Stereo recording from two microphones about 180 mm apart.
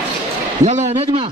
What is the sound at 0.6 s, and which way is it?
Speech, 40° right (ahead or behind).